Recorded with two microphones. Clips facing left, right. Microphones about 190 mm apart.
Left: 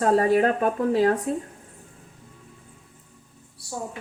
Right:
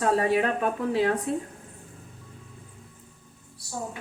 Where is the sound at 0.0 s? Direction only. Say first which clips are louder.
Left 4 dB; 40° left (ahead or behind).